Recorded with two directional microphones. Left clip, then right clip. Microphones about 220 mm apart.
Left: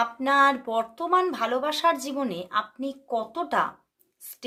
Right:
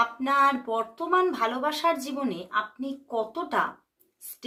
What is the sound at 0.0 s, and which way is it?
Speech, 30° left (ahead or behind).